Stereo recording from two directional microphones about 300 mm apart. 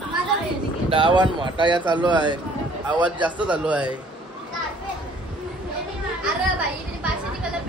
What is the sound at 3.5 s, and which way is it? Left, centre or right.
Speech, centre.